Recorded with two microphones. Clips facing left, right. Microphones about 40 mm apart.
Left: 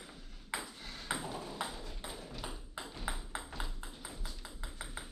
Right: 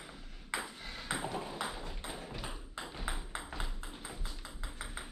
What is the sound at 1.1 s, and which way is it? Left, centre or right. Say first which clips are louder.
Ping: right 3 dB; right.